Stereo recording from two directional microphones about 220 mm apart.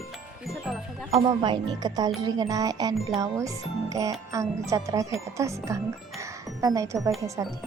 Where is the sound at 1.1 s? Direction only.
20° right (ahead or behind).